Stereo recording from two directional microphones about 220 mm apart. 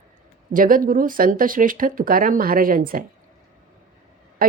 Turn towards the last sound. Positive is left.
turn(degrees=-40)  # may be behind; listen again after turning